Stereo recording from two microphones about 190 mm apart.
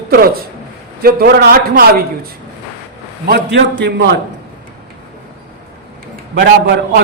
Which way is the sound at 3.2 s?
65° right (ahead or behind).